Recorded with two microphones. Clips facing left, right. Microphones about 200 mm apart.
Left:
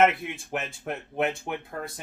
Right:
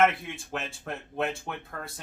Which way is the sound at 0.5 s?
20° left (ahead or behind).